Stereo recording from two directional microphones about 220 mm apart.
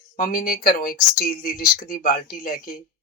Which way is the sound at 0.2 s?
40° left (ahead or behind).